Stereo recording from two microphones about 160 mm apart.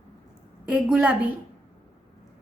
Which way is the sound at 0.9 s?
5° right (ahead or behind).